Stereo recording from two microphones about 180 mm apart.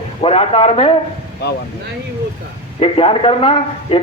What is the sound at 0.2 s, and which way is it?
Speech, 30° left (ahead or behind).